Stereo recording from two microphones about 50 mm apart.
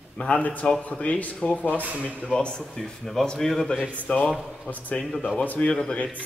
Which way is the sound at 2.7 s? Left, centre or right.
Centre.